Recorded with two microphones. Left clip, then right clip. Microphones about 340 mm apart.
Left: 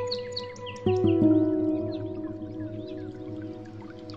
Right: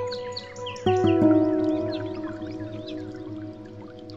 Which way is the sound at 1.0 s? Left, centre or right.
Right.